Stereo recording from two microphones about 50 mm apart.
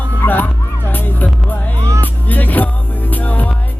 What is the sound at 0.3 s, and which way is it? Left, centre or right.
Music, left.